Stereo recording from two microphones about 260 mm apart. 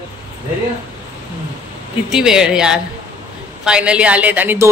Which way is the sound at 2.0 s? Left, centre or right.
Centre.